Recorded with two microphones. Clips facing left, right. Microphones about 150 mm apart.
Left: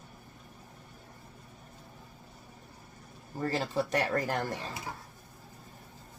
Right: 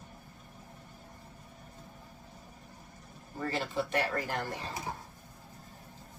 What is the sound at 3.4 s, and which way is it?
Speech, 40° left (ahead or behind).